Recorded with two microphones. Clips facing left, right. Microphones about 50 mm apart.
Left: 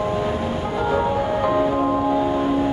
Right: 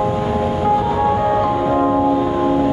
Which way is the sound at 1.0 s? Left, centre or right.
Right.